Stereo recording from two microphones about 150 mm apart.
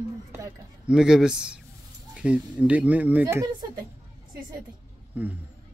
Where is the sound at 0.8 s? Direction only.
5° right (ahead or behind).